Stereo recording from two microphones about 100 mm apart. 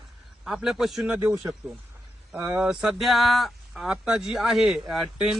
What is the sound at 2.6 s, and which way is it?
A man's voice, 10° right (ahead or behind).